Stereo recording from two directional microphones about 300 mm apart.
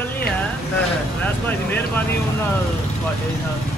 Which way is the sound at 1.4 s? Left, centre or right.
Centre.